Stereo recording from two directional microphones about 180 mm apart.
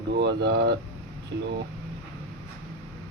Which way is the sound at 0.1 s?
65° right (ahead or behind).